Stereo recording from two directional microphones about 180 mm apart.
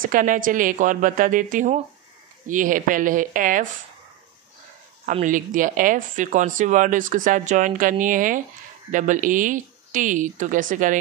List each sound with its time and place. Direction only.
0.0 s a woman's voice: 50° right (ahead or behind)
5.0 s a woman's voice: 45° right (ahead or behind)